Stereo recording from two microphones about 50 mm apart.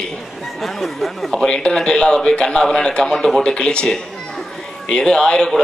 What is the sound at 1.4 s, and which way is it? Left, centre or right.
A man's voice, centre.